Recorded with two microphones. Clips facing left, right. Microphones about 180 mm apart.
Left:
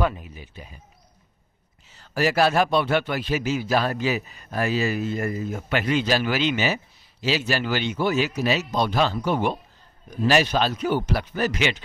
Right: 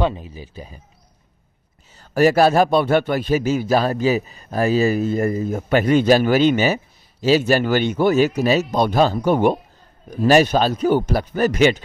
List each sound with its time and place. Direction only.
0.0 s speech: 30° right (ahead or behind)
2.0 s a man's voice: 45° right (ahead or behind)